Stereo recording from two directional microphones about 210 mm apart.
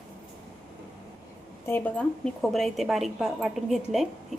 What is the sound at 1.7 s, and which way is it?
A woman's voice, 10° left (ahead or behind).